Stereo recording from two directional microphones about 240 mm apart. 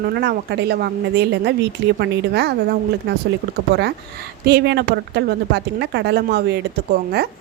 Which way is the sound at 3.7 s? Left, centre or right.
Right.